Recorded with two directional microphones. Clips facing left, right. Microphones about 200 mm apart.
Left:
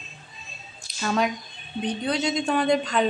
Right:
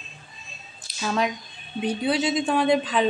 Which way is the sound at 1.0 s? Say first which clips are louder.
Left 1 dB; centre (ahead or behind).